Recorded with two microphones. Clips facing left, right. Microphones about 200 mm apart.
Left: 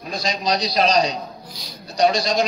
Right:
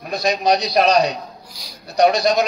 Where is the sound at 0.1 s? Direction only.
60° right (ahead or behind).